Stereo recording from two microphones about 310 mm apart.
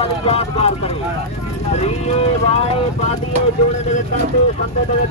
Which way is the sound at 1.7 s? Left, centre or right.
Left.